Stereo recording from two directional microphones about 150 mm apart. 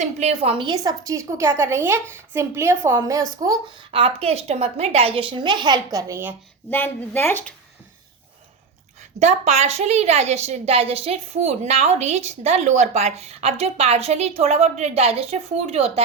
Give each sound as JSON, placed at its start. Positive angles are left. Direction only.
{"t": 0.0, "sound": "a woman's voice", "side_deg": -45}
{"t": 0.6, "sound": "a woman's voice", "side_deg": -25}
{"t": 6.7, "sound": "a woman's voice", "side_deg": 15}
{"t": 9.1, "sound": "a woman's voice", "side_deg": -50}